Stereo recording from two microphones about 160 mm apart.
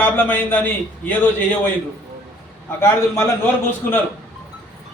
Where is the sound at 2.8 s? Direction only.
15° left (ahead or behind).